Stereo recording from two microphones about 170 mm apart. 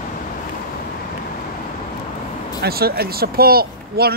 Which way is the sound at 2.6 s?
65° right (ahead or behind).